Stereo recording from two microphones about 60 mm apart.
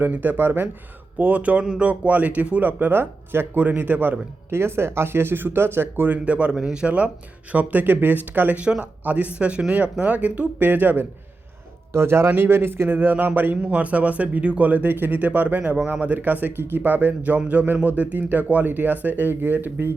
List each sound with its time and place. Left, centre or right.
0.0 s speech: right
4.5 s speech: right
6.1 s speech: right
8.6 s speech: centre
11.9 s a man's voice: right